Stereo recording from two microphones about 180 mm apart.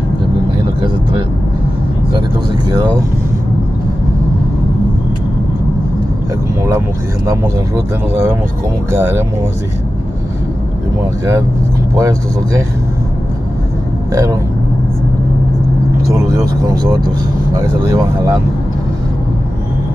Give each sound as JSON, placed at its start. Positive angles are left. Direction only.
{"t": 2.7, "sound": "speech", "side_deg": -20}
{"t": 7.2, "sound": "speech", "side_deg": -15}
{"t": 11.9, "sound": "speech", "side_deg": -20}
{"t": 14.1, "sound": "speech", "side_deg": -20}
{"t": 17.6, "sound": "speech", "side_deg": -20}